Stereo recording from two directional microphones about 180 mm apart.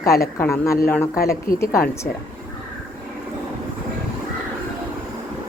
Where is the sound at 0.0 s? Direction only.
55° left (ahead or behind).